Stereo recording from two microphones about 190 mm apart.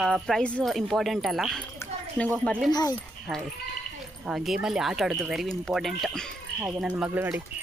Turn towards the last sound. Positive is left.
turn(degrees=-5)  # may be behind; listen again after turning